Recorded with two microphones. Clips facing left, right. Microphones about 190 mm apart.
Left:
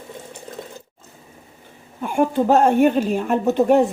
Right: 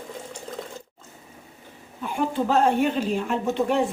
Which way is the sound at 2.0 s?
50° left (ahead or behind).